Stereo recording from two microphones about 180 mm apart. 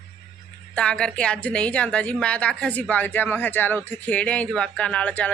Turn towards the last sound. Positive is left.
turn(degrees=5)  # may be behind; listen again after turning